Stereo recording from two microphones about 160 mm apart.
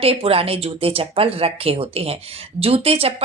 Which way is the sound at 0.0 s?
35° right (ahead or behind).